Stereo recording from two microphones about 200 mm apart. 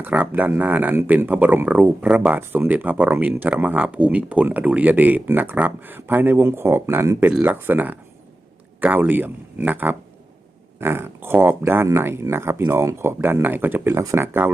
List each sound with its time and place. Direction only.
0.0 s speech: 10° right (ahead or behind)